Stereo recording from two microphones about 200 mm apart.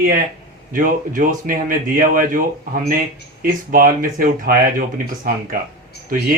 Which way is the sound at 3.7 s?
45° right (ahead or behind).